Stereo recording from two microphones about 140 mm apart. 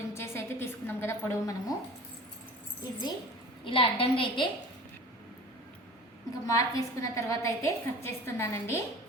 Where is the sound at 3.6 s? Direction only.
40° left (ahead or behind).